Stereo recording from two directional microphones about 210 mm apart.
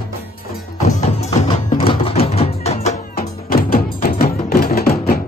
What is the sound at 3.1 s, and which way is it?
Music, 45° left (ahead or behind).